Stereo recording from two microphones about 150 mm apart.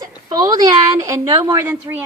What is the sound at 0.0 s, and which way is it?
A woman's voice, 25° right (ahead or behind).